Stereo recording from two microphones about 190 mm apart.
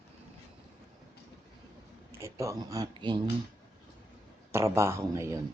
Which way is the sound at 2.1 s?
15° right (ahead or behind).